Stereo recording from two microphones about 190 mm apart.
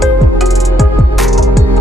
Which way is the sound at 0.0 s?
Centre (ahead or behind).